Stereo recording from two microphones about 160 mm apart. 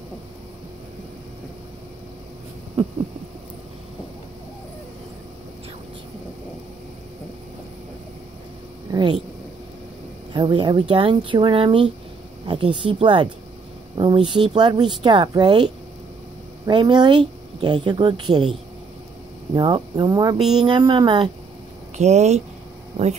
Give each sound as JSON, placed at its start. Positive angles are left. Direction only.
{"t": 8.9, "sound": "a sound", "side_deg": -25}
{"t": 10.3, "sound": "a woman's voice", "side_deg": -30}
{"t": 19.5, "sound": "a woman's voice", "side_deg": -30}
{"t": 20.3, "sound": "speech", "side_deg": -5}
{"t": 20.6, "sound": "a woman's voice", "side_deg": -30}
{"t": 21.9, "sound": "speech", "side_deg": -45}